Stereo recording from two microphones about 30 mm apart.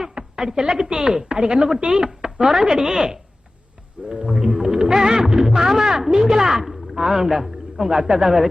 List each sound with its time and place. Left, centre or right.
0.1 s speech: right
4.5 s music: centre
5.4 s speech: centre